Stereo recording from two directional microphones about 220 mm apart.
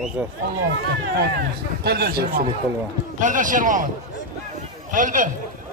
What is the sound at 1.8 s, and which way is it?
A man's voice, 45° right (ahead or behind).